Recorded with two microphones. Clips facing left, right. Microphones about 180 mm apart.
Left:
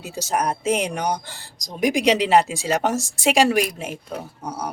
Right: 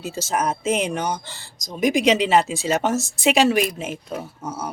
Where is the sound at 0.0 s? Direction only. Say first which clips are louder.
Even; 15° left (ahead or behind).